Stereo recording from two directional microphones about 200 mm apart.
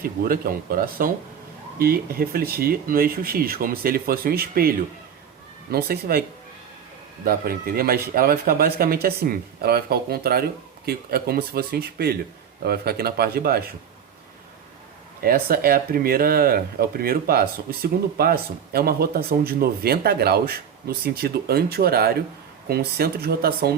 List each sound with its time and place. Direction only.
0.0 s speech: 45° right (ahead or behind)
5.7 s speech: 50° right (ahead or behind)
7.3 s speech: 50° right (ahead or behind)
15.2 s speech: 50° right (ahead or behind)